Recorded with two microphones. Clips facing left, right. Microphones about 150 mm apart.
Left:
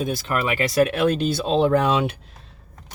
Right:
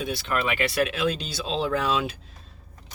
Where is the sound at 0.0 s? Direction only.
45° left (ahead or behind).